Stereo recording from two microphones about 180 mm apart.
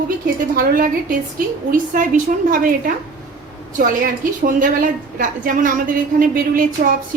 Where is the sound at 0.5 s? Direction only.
50° right (ahead or behind).